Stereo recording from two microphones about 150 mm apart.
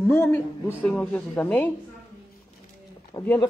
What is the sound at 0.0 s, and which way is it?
A woman's voice, 15° left (ahead or behind).